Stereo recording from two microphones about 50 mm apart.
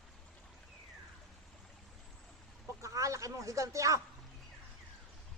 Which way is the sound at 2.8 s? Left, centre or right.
Right.